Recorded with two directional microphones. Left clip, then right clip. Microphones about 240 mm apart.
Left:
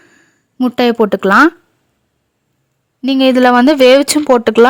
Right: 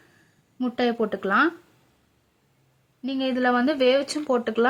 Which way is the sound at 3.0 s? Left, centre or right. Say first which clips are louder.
Left 15 dB; left.